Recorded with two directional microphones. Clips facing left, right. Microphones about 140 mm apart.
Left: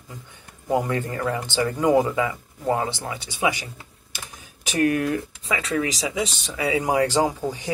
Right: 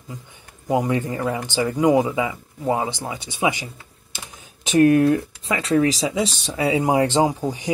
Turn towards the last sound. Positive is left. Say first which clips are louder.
# right 3 dB
turn(degrees=-15)  # may be behind; listen again after turning